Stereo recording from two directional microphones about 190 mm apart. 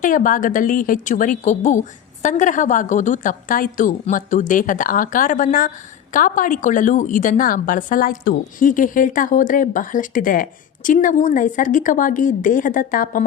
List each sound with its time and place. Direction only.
0.0 s a woman's voice: 45° left (ahead or behind)